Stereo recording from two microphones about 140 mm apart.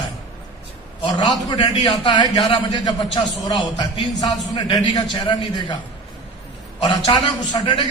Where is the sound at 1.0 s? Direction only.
30° left (ahead or behind).